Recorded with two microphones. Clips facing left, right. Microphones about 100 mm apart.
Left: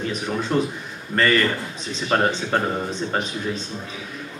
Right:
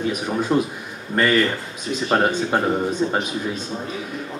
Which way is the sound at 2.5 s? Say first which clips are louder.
Right 3 dB; 10° right (ahead or behind).